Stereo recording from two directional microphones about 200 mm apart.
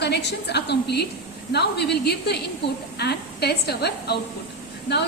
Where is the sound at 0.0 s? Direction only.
55° left (ahead or behind).